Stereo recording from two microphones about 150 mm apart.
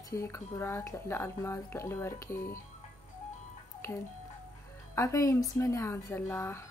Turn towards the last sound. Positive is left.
turn(degrees=15)  # may be behind; listen again after turning